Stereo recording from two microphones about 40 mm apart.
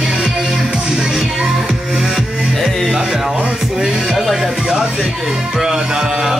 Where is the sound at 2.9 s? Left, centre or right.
Right.